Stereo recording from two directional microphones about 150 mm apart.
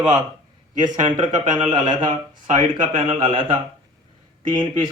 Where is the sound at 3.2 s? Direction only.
35° right (ahead or behind).